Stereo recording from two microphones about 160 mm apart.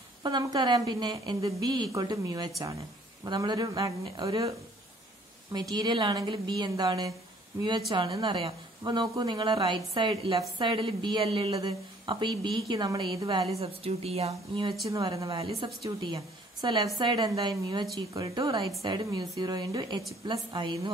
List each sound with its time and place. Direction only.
0.2 s a woman's voice: 25° right (ahead or behind)
13.6 s a woman's voice: 40° right (ahead or behind)